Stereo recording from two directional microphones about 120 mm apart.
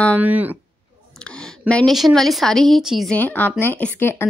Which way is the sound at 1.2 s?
10° left (ahead or behind).